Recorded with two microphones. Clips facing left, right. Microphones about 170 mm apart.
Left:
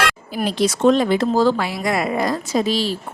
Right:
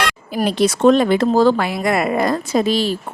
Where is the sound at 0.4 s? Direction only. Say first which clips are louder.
Right 3 dB; 60° right (ahead or behind).